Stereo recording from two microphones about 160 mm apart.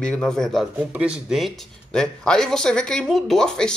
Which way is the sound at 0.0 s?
5° left (ahead or behind).